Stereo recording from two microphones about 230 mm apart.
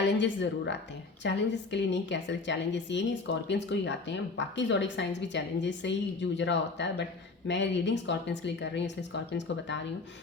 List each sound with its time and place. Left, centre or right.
0.2 s a woman's voice: left